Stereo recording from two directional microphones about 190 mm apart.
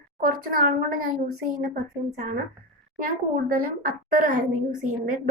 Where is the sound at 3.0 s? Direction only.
50° right (ahead or behind).